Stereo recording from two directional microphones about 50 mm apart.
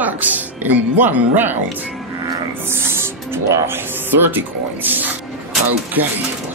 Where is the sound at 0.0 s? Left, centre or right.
Right.